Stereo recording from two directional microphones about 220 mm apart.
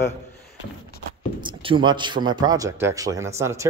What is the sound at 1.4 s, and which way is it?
Speech, 20° right (ahead or behind).